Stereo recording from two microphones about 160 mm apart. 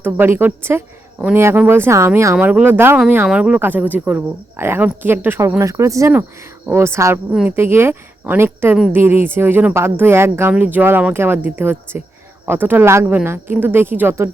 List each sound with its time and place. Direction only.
0.0 s a woman's voice: 15° right (ahead or behind)